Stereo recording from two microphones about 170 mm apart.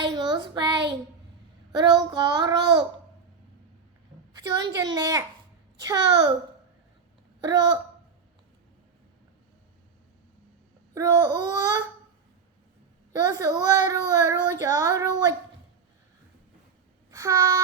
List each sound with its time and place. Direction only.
0.0 s child singing: 25° right (ahead or behind)
1.7 s a child's voice: 25° right (ahead or behind)
4.4 s a child's voice: 25° right (ahead or behind)
7.4 s a child's voice: 25° right (ahead or behind)
10.9 s a child's voice: 20° right (ahead or behind)
13.1 s a child's voice: 20° right (ahead or behind)
17.1 s a sound: 20° right (ahead or behind)